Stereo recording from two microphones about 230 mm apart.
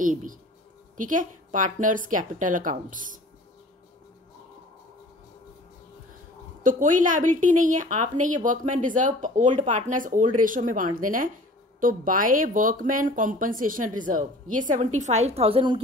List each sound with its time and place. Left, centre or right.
0.0 s a woman's voice: right
6.6 s a woman's voice: right